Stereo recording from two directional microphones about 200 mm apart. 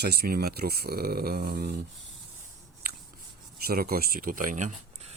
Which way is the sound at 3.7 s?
50° right (ahead or behind).